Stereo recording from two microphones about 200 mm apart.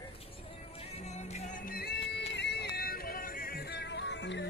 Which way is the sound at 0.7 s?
35° left (ahead or behind).